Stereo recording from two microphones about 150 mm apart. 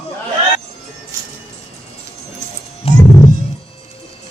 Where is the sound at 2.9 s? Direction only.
45° left (ahead or behind).